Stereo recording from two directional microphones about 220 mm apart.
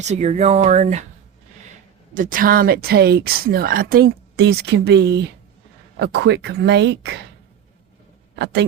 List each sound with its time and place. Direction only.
0.0 s speech: 30° right (ahead or behind)
2.1 s speech: 40° right (ahead or behind)